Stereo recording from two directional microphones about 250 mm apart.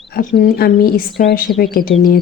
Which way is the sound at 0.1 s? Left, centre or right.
Left.